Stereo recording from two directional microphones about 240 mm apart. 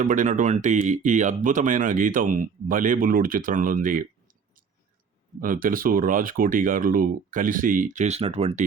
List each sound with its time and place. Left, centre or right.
0.0 s speech: right
5.4 s speech: right